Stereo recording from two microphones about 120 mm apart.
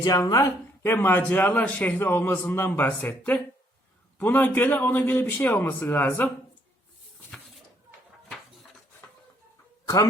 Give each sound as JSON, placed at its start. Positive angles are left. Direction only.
{"t": 0.0, "sound": "speech", "side_deg": 30}
{"t": 9.8, "sound": "speech", "side_deg": 30}